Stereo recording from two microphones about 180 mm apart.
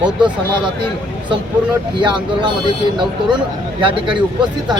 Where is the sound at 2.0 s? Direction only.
25° right (ahead or behind).